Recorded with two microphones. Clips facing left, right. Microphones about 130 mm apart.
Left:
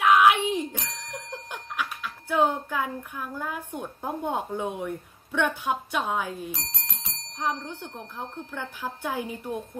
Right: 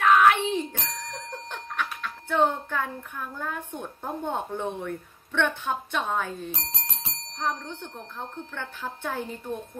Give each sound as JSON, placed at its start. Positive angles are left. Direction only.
{"t": 0.0, "sound": "speech", "side_deg": 10}
{"t": 6.5, "sound": "bell", "side_deg": -25}
{"t": 7.3, "sound": "a woman's voice", "side_deg": 15}